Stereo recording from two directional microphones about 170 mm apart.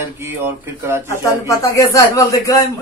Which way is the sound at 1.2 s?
20° left (ahead or behind).